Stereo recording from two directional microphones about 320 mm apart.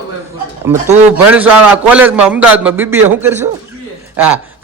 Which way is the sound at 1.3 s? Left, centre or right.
Centre.